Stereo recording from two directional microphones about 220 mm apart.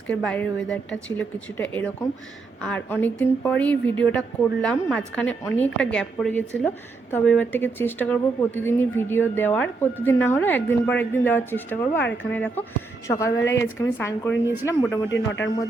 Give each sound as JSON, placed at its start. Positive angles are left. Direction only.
{"t": 0.1, "sound": "a woman's voice", "side_deg": 5}
{"t": 15.1, "sound": "a man's voice", "side_deg": 55}